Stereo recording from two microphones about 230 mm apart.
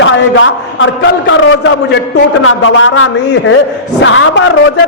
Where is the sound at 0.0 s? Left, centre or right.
Left.